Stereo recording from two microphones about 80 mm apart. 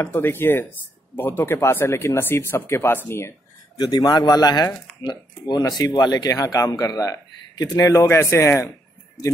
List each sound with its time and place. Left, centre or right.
0.0 s speech: left
3.7 s speech: left
7.9 s speech: left